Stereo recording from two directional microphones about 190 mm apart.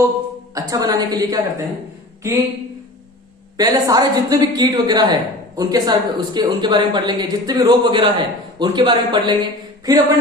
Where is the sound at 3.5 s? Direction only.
20° right (ahead or behind).